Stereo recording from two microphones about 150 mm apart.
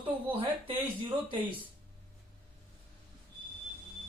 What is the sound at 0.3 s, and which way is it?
Speech, 35° right (ahead or behind).